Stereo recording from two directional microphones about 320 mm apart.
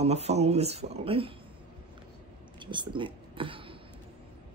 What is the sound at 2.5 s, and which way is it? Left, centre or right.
Speech, centre.